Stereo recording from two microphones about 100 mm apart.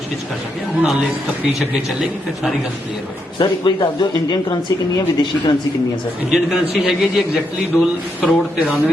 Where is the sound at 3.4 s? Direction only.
50° left (ahead or behind).